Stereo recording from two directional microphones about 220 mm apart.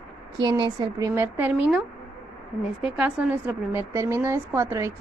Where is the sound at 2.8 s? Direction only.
5° right (ahead or behind).